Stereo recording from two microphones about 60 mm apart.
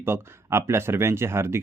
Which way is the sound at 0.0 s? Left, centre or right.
Right.